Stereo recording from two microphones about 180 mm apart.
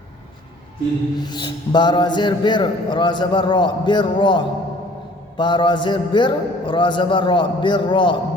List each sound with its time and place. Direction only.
1.2 s a man's voice: 25° left (ahead or behind)